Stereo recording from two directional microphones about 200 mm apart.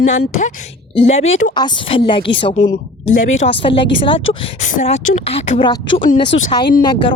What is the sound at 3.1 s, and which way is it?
Speech, 75° left (ahead or behind).